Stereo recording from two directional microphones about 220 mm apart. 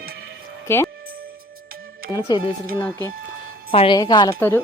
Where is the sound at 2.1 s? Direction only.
20° left (ahead or behind).